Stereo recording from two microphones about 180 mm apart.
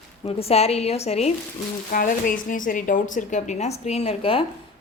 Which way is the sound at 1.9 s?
50° left (ahead or behind).